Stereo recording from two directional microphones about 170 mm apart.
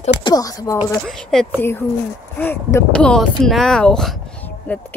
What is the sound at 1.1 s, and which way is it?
Speech, centre (ahead or behind).